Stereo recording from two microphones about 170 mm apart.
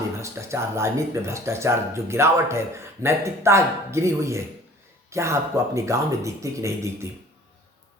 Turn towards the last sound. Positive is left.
turn(degrees=-15)  # may be behind; listen again after turning